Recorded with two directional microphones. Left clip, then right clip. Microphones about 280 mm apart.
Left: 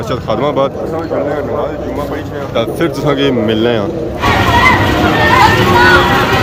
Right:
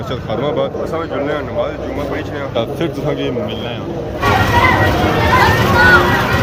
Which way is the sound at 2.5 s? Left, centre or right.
Centre.